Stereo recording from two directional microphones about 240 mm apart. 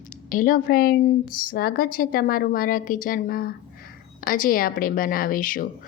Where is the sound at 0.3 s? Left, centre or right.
Left.